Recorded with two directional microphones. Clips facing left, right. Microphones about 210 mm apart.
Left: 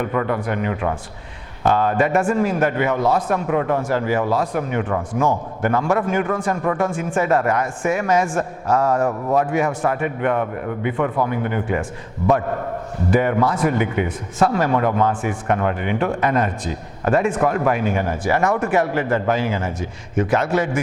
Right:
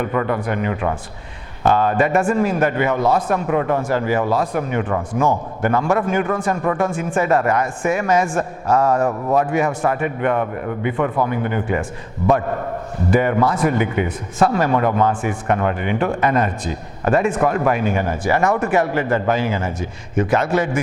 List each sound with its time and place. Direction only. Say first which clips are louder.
0.0 s a man's voice: right 1 dB; 15° right (ahead or behind)